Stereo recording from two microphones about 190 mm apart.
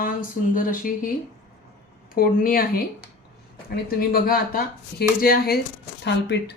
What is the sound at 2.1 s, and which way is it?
Speech, 50° left (ahead or behind).